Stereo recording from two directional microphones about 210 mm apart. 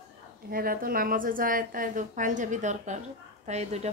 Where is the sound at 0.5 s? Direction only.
45° right (ahead or behind).